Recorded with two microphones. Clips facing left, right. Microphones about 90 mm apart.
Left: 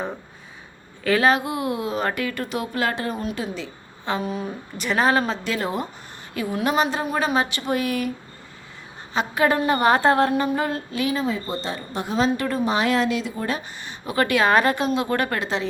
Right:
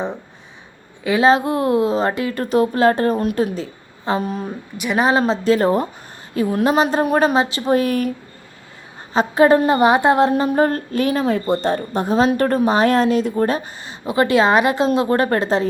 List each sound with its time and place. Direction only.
1.0 s a woman's voice: 15° right (ahead or behind)
1.3 s a woman's voice: 30° right (ahead or behind)
4.8 s a woman's voice: 15° right (ahead or behind)
5.2 s speech: 35° right (ahead or behind)
6.8 s a woman's voice: 50° right (ahead or behind)
7.3 s speech: 30° right (ahead or behind)
9.1 s speech: 30° right (ahead or behind)
9.6 s a woman's voice: 20° right (ahead or behind)
10.3 s a woman's voice: 40° right (ahead or behind)
14.0 s a woman's voice: 25° right (ahead or behind)
14.8 s speech: 35° right (ahead or behind)